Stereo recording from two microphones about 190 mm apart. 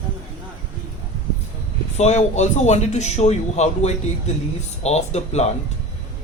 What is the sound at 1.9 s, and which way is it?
A man's voice, 35° left (ahead or behind).